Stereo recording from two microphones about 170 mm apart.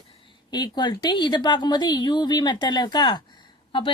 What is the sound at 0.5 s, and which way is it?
Speech, 25° left (ahead or behind).